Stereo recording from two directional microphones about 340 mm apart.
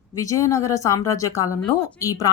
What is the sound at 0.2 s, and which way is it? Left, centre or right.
Speech, centre.